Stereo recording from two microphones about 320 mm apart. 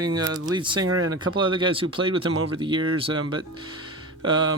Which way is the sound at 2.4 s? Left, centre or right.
Right.